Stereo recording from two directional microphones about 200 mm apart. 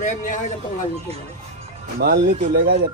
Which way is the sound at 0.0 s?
40° left (ahead or behind).